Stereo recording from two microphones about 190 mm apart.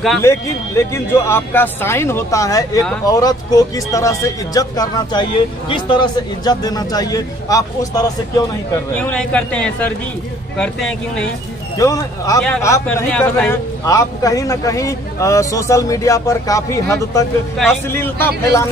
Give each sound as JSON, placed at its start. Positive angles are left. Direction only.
{"t": 0.2, "sound": "a man's voice", "side_deg": 15}
{"t": 8.9, "sound": "a man's voice", "side_deg": 5}
{"t": 11.8, "sound": "a man's voice", "side_deg": 15}